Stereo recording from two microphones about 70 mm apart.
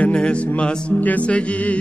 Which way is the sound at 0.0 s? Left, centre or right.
Centre.